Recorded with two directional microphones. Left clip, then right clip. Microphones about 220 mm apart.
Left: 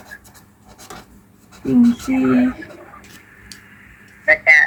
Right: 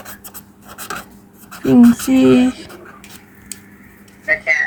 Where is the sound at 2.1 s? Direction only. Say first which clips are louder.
Right 6 dB; 40° right (ahead or behind).